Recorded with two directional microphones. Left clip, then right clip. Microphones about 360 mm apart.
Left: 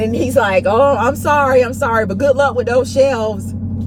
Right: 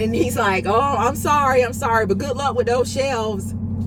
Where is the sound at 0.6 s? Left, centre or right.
Centre.